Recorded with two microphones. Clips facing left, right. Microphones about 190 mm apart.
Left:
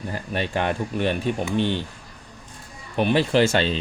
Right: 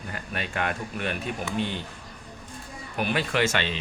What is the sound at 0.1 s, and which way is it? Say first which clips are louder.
Speech: left 7 dB; 30° left (ahead or behind).